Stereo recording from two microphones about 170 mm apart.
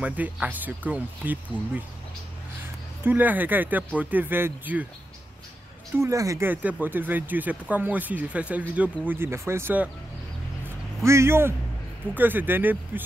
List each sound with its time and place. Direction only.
0.0 s speech: 10° right (ahead or behind)
3.0 s speech: 10° right (ahead or behind)
5.9 s speech: 15° right (ahead or behind)
11.0 s speech: 15° right (ahead or behind)